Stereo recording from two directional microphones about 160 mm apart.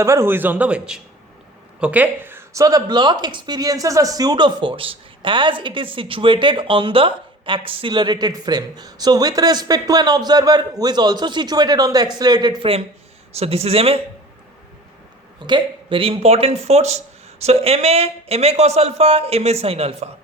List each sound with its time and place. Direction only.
0.0 s speech: 15° right (ahead or behind); by 14.0 s 40° right (ahead or behind)
15.4 s speech: 30° right (ahead or behind)